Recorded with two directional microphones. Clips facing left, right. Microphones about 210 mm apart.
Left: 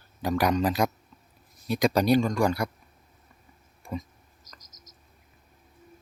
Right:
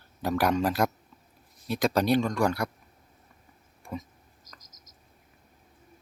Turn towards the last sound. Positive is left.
turn(degrees=-55)  # may be behind; listen again after turning